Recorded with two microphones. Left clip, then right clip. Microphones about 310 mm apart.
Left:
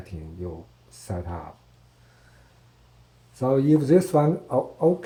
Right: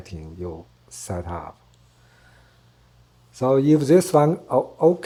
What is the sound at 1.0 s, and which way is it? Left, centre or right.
Speech, right.